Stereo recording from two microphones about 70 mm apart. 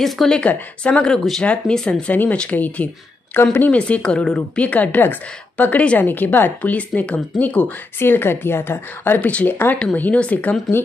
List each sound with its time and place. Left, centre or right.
0.0 s speech: centre
0.4 s speech: centre
2.5 s a woman's voice: left
8.0 s speech: left
9.3 s a woman's voice: centre